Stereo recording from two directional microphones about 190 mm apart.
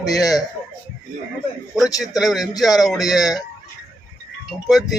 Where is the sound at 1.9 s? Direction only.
20° left (ahead or behind).